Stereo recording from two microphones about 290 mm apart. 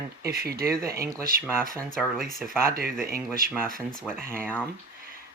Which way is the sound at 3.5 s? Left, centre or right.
Centre.